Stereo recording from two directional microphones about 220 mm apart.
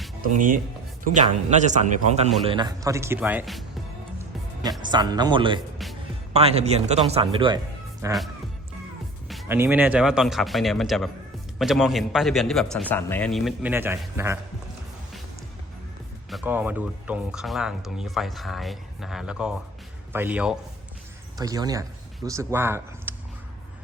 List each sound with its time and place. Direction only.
0.2 s speech: 35° right (ahead or behind)
2.4 s speech: 20° right (ahead or behind); by 3.6 s 5° right (ahead or behind)
4.8 s speech: 20° right (ahead or behind)
5.8 s music: centre (ahead or behind)
6.3 s speech: 30° right (ahead or behind)
9.3 s music: centre (ahead or behind)
9.6 s speech: 10° right (ahead or behind)
16.3 s speech: 5° right (ahead or behind)
21.3 s speech: 15° right (ahead or behind)